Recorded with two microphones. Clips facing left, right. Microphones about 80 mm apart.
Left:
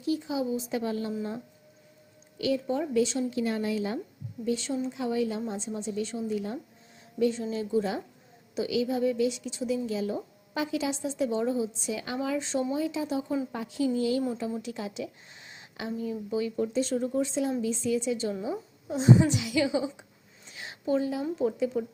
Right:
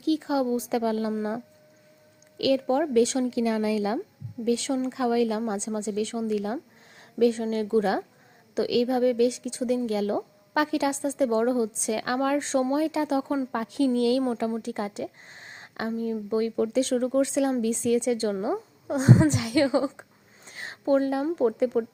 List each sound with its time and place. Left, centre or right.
0.0 s speech: right
2.4 s a woman's voice: right
4.4 s a woman's voice: right
14.5 s speech: right
16.6 s speech: right